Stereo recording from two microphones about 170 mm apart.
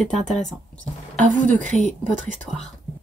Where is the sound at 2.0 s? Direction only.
45° right (ahead or behind).